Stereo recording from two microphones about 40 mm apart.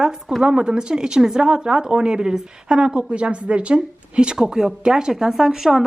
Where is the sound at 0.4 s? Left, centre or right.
Right.